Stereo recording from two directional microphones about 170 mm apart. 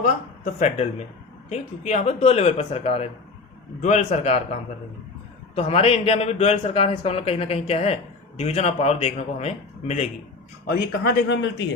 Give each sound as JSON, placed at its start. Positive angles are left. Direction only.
{"t": 0.6, "sound": "a man's voice", "side_deg": 40}
{"t": 5.5, "sound": "a man's voice", "side_deg": 35}
{"t": 10.7, "sound": "speech", "side_deg": 65}